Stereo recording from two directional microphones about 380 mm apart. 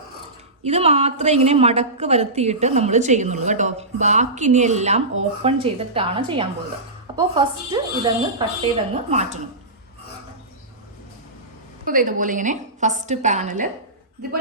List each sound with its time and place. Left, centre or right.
0.6 s a woman's voice: centre
11.9 s a woman's voice: right